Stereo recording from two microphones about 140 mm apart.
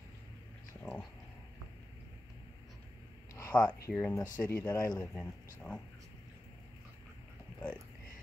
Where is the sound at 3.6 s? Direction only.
20° left (ahead or behind).